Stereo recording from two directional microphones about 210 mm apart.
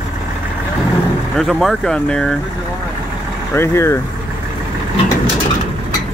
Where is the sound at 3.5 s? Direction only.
10° left (ahead or behind).